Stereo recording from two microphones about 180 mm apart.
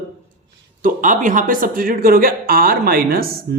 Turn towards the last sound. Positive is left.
turn(degrees=-55)  # may be behind; listen again after turning